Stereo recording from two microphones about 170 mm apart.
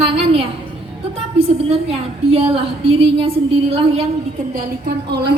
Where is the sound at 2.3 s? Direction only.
35° right (ahead or behind).